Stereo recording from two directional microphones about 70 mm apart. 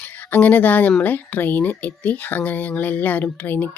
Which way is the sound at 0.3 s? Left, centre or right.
Left.